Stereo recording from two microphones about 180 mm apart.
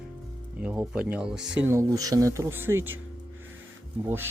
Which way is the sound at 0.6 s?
5° right (ahead or behind).